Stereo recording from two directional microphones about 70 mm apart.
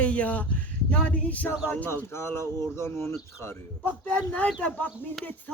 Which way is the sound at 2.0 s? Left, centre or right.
Left.